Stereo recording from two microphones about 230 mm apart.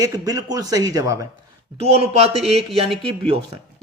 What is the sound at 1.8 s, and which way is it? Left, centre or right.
A man's voice, right.